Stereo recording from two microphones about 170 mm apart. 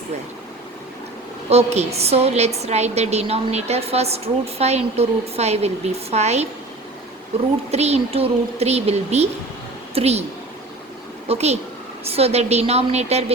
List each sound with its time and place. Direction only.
1.5 s a woman's voice: 40° right (ahead or behind)
7.7 s a woman's voice: 40° right (ahead or behind)
11.3 s a woman's voice: 40° right (ahead or behind)